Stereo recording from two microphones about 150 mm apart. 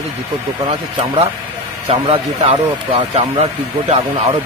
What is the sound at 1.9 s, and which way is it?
Speech, 40° right (ahead or behind).